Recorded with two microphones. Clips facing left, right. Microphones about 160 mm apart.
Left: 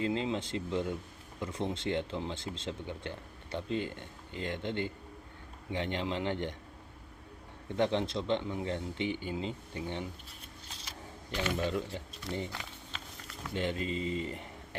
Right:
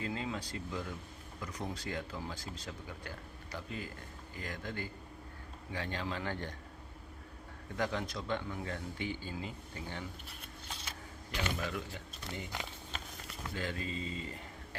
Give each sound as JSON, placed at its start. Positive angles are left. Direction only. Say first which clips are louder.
{"t": 0.0, "sound": "a man's voice", "louder": "left 6 dB", "side_deg": 25}
{"t": 7.8, "sound": "a man's voice", "louder": "left 6 dB", "side_deg": 25}
{"t": 11.4, "sound": "speech", "louder": "left 6 dB", "side_deg": 30}
{"t": 12.9, "sound": "a sound", "louder": "right 1 dB", "side_deg": -45}
{"t": 13.5, "sound": "speech", "louder": "left 6 dB", "side_deg": 20}